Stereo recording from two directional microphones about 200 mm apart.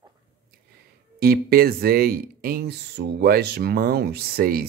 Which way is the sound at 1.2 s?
50° right (ahead or behind).